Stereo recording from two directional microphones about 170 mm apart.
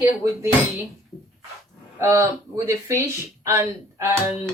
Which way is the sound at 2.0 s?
15° right (ahead or behind).